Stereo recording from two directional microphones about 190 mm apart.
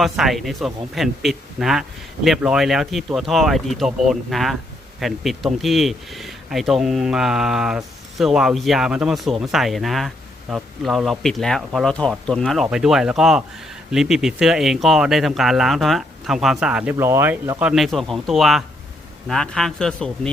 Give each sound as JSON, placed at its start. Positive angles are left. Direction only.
{"t": 0.0, "sound": "speech", "side_deg": 0}
{"t": 17.6, "sound": "speech", "side_deg": -5}